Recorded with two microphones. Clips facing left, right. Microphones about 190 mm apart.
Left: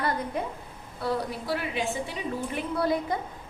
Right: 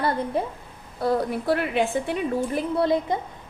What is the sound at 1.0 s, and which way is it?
A woman's voice, 50° right (ahead or behind).